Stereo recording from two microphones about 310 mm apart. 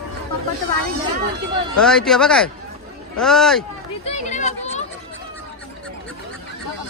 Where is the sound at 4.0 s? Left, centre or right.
Left.